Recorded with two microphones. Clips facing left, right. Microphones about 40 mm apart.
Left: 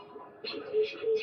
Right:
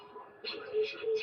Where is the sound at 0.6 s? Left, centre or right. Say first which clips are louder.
Left 4 dB; centre.